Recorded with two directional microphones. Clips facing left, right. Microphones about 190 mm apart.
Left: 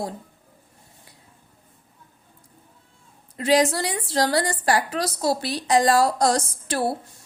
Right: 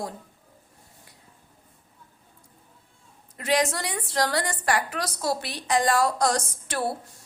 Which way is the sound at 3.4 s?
30° left (ahead or behind).